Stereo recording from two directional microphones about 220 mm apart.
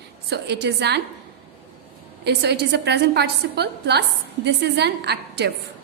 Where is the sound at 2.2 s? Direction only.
50° right (ahead or behind).